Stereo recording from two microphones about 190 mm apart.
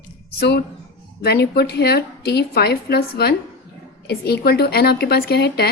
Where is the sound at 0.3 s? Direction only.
60° left (ahead or behind).